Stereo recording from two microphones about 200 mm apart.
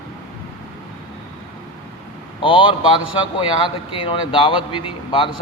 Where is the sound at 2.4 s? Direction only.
25° left (ahead or behind).